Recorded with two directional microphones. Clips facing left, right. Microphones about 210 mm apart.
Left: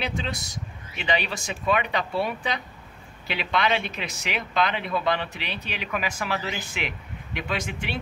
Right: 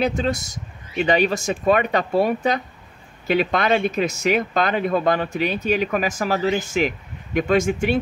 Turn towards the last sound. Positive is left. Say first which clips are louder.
# right 12 dB
turn(degrees=-45)  # may be behind; listen again after turning